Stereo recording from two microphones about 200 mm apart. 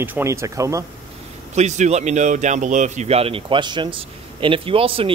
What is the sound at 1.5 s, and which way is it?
Speech, 35° right (ahead or behind).